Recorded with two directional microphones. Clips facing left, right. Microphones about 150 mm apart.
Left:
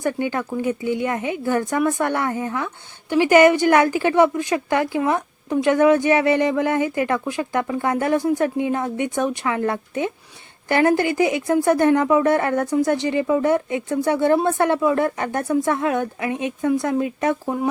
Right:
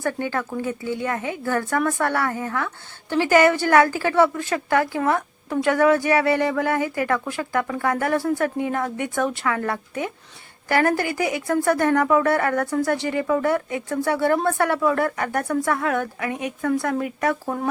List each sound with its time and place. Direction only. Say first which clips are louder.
0.0 s a woman's voice: left 2 dB; 15° left (ahead or behind)